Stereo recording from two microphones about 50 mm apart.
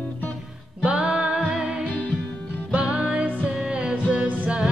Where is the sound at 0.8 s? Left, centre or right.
Right.